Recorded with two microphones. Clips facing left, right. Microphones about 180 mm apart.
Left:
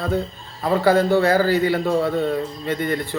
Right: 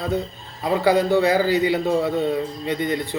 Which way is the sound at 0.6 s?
15° right (ahead or behind).